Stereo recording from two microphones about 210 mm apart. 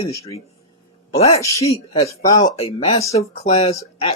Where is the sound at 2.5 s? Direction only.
30° left (ahead or behind).